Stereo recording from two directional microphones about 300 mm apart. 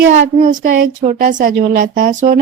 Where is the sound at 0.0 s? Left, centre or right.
Right.